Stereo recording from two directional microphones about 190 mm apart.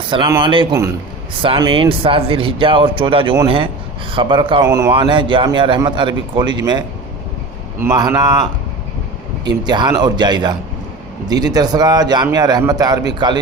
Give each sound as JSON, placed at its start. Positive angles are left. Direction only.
{"t": 0.1, "sound": "a man's voice", "side_deg": -25}
{"t": 0.7, "sound": "a man's voice", "side_deg": -15}
{"t": 9.5, "sound": "a man's voice", "side_deg": -20}